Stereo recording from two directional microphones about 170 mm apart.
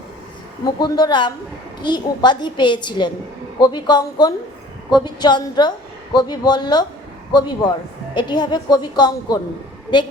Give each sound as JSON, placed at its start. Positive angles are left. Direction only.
{"t": 0.6, "sound": "a woman's voice", "side_deg": 25}